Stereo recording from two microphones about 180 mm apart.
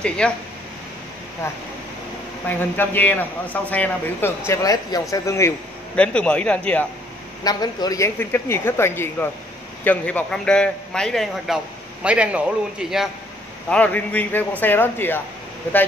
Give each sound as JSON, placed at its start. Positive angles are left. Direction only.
{"t": 0.2, "sound": "a man's voice", "side_deg": 5}
{"t": 2.4, "sound": "a man's voice", "side_deg": 10}
{"t": 7.4, "sound": "a man's voice", "side_deg": 20}
{"t": 13.7, "sound": "a man's voice", "side_deg": 5}